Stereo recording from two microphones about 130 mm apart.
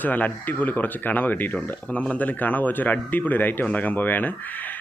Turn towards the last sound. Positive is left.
turn(degrees=15)  # may be behind; listen again after turning